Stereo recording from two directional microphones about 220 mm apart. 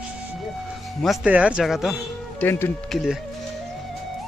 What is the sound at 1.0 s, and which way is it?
Speech, 5° right (ahead or behind).